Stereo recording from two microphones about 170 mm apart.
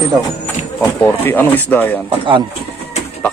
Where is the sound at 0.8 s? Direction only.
10° left (ahead or behind).